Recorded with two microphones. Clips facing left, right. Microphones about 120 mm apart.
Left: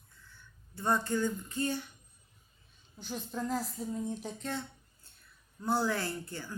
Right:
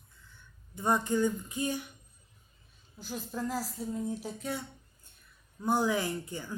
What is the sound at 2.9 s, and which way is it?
Speech, centre (ahead or behind).